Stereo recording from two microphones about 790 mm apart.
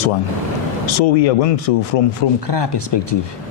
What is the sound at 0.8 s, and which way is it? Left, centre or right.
Speech, left.